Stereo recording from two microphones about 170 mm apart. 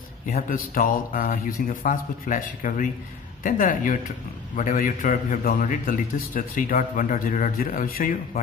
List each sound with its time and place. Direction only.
0.3 s a man's voice: 40° left (ahead or behind)
0.7 s a man's voice: 55° left (ahead or behind)